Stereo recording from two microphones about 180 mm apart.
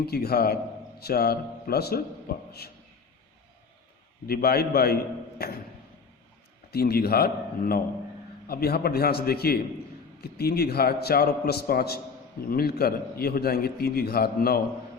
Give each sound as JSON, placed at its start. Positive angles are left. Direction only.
{"t": 0.0, "sound": "a man's voice", "side_deg": 60}
{"t": 4.3, "sound": "a man's voice", "side_deg": 60}
{"t": 6.7, "sound": "a man's voice", "side_deg": 60}